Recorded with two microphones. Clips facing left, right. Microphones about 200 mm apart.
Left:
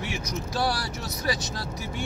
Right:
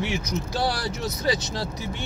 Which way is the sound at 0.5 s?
25° right (ahead or behind).